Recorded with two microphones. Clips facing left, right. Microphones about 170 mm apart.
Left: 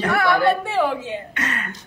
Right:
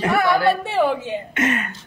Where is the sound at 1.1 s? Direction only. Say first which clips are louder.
Right 6 dB; 20° right (ahead or behind).